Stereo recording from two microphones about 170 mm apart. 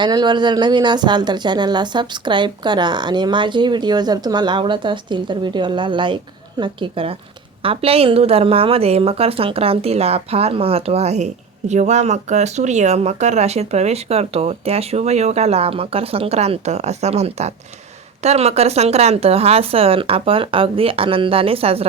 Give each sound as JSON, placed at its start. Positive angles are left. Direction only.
{"t": 0.0, "sound": "a woman's voice", "side_deg": -25}